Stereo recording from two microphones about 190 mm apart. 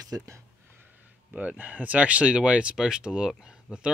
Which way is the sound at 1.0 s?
5° right (ahead or behind).